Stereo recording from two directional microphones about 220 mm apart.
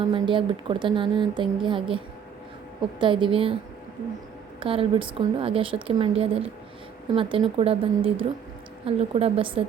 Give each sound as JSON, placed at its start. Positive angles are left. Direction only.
{"t": 0.0, "sound": "speech", "side_deg": -20}
{"t": 3.0, "sound": "speech", "side_deg": -20}
{"t": 4.6, "sound": "speech", "side_deg": -25}